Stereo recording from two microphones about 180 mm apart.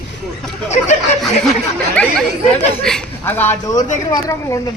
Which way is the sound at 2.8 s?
5° left (ahead or behind).